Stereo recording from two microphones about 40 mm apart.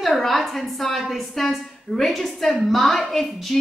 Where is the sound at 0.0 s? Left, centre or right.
Centre.